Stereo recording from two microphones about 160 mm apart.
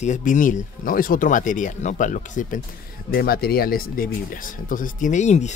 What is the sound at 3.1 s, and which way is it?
Speech, 70° left (ahead or behind).